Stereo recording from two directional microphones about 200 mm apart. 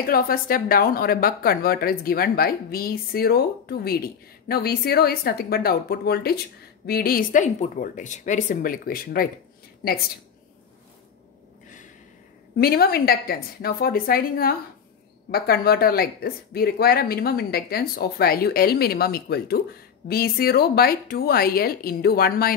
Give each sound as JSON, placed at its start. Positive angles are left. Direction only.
{"t": 0.0, "sound": "a woman's voice", "side_deg": 50}
{"t": 12.5, "sound": "a woman's voice", "side_deg": 50}